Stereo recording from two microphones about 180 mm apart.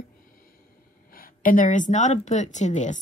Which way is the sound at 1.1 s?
50° left (ahead or behind).